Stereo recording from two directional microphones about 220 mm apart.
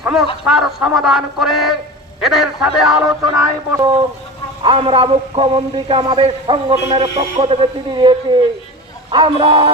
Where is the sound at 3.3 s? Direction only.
15° right (ahead or behind).